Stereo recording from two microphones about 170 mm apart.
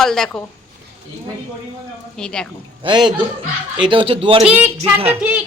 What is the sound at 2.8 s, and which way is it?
A man's voice, 25° right (ahead or behind).